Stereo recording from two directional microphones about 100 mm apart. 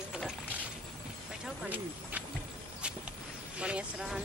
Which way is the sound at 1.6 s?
15° right (ahead or behind).